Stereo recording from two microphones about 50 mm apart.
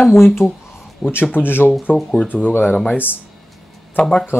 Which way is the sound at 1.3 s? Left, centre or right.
Left.